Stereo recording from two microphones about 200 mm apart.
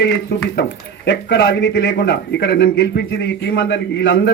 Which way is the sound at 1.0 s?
60° left (ahead or behind).